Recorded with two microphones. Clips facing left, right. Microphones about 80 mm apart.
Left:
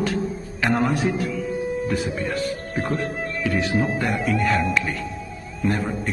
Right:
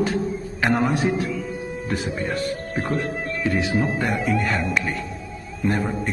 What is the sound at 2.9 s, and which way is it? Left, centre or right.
Speech, centre.